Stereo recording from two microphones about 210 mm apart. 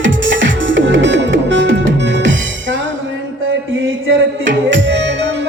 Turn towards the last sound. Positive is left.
turn(degrees=-60)  # may be behind; listen again after turning